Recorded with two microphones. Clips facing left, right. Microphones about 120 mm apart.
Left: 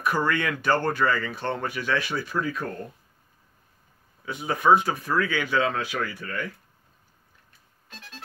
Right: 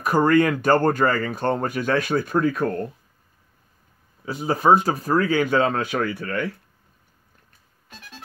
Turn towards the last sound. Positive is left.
turn(degrees=-60)  # may be behind; listen again after turning